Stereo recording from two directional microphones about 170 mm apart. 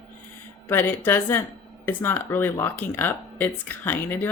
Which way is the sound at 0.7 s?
10° left (ahead or behind).